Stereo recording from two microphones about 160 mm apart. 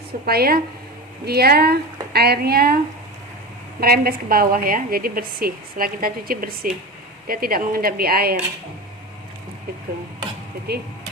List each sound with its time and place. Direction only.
0.3 s a woman's voice: 70° right (ahead or behind)
3.8 s a woman's voice: 70° right (ahead or behind)
10.7 s speech: 90° right